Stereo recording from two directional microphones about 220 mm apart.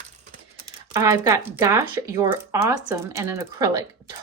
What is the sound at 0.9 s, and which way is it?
Speech, 15° right (ahead or behind).